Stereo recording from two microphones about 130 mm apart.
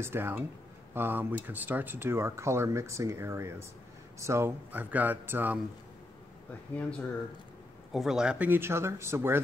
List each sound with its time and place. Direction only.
0.0 s speech: 15° right (ahead or behind)
7.9 s speech: 5° right (ahead or behind); by 9.4 s 20° right (ahead or behind)